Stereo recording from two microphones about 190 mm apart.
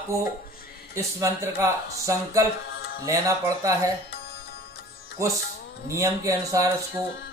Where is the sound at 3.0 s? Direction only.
15° right (ahead or behind).